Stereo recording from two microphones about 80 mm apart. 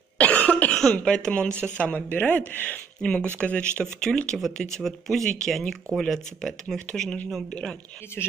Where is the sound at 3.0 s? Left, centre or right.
Centre.